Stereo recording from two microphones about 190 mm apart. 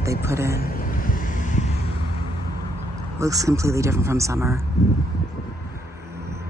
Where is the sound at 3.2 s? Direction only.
15° right (ahead or behind).